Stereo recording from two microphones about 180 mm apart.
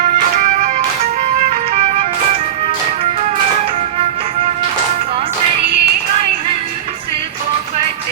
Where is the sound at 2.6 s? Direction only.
35° right (ahead or behind).